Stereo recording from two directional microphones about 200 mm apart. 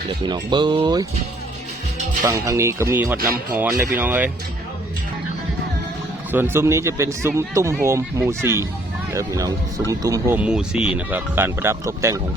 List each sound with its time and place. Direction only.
0.2 s speech: 20° right (ahead or behind)
2.2 s speech: 15° right (ahead or behind)
6.3 s speech: 10° right (ahead or behind)